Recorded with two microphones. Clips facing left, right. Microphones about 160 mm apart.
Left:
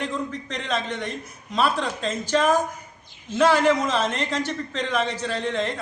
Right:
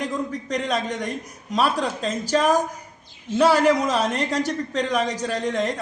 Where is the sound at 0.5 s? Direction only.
40° right (ahead or behind).